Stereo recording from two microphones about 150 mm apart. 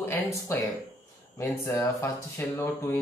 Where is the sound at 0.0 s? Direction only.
15° left (ahead or behind).